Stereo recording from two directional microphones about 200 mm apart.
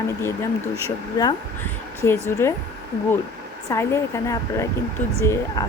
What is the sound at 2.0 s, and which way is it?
Speech, 15° left (ahead or behind).